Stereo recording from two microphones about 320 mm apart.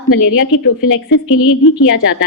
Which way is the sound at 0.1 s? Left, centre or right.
Left.